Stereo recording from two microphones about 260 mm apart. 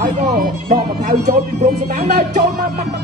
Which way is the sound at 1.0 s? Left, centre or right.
Right.